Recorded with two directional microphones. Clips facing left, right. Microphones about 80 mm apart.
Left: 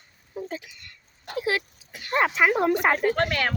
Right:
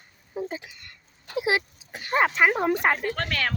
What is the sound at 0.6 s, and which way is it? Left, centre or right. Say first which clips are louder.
Speech: right 2 dB; right.